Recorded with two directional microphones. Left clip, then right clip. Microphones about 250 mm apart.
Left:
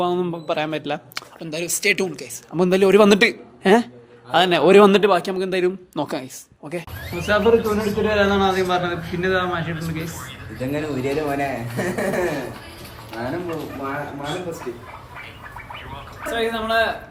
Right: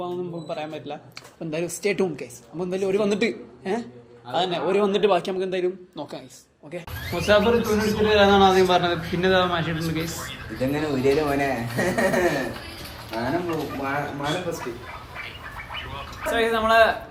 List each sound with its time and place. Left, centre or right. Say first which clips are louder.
0.0 s a man's voice: left 8 dB; left
5.0 s speech: left 3 dB; centre
7.0 s a man's voice: even; centre
16.2 s a man's voice: right 2 dB; centre